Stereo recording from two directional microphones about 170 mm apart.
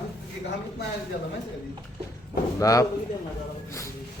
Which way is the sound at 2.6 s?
20° left (ahead or behind).